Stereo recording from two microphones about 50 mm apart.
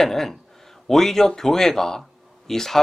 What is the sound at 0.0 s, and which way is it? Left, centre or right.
Speech, centre.